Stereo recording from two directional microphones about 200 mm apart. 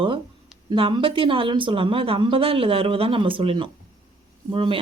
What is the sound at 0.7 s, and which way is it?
Speech, 25° right (ahead or behind).